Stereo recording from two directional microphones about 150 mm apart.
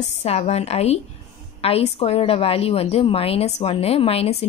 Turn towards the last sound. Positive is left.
turn(degrees=40)  # may be behind; listen again after turning